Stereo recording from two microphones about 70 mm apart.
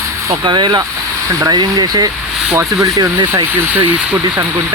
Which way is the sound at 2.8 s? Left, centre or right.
Right.